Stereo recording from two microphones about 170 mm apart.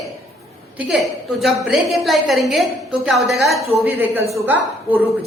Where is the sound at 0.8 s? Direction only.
Centre (ahead or behind).